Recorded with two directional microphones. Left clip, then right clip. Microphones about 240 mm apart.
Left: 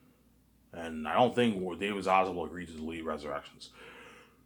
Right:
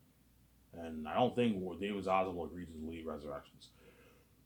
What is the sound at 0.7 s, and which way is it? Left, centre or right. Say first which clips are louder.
Speech: left 7 dB; centre.